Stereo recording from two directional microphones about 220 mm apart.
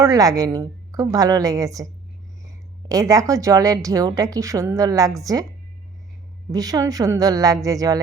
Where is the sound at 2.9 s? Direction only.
15° right (ahead or behind).